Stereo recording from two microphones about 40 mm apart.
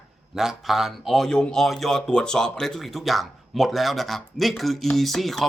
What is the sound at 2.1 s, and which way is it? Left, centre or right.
Speech, centre.